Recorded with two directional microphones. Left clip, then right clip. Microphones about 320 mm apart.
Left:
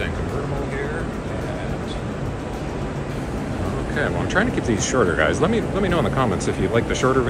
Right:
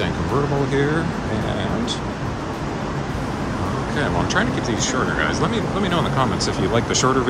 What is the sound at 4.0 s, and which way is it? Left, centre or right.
Speech, centre.